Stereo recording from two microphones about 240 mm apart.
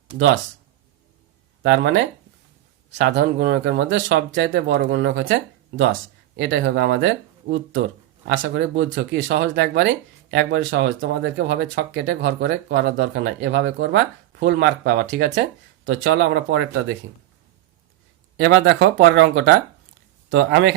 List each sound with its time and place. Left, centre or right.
1.6 s speech: right
18.3 s speech: right